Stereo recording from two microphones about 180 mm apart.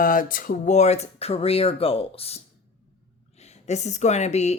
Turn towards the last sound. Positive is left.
turn(degrees=40)  # may be behind; listen again after turning